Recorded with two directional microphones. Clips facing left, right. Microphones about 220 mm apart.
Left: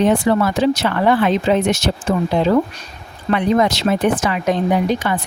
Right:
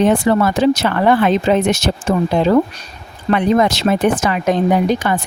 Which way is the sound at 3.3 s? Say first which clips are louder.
Right 2 dB; 50° right (ahead or behind).